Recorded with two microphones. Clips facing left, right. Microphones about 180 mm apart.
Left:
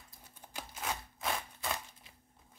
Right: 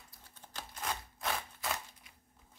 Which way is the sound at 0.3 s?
10° left (ahead or behind).